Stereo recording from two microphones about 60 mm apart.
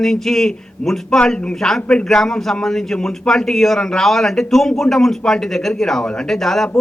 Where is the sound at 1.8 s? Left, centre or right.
Centre.